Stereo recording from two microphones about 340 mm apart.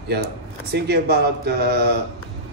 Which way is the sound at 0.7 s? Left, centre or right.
Right.